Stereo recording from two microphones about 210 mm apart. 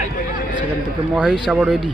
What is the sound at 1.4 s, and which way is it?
Speech, 5° right (ahead or behind).